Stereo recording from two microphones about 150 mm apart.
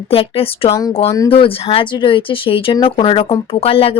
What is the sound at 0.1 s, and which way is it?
A woman's voice, 40° left (ahead or behind).